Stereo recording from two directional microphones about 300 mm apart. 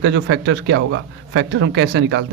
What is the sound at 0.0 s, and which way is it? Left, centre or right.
Speech, right.